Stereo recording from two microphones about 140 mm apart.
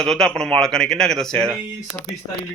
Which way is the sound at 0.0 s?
5° left (ahead or behind).